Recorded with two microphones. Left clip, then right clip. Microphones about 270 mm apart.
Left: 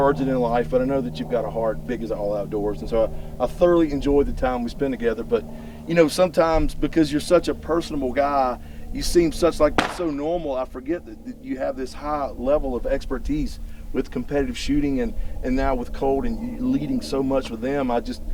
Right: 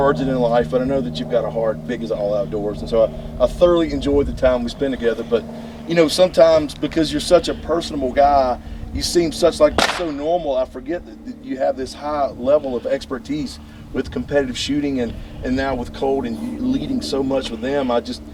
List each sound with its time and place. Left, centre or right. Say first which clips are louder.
0.0 s speech: right 3 dB; left